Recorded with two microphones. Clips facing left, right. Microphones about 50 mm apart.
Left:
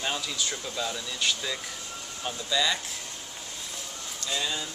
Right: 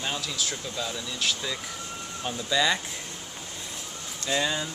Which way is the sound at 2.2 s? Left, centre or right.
Centre.